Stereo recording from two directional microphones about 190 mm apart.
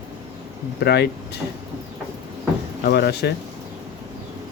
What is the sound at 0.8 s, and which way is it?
Speech, 60° left (ahead or behind).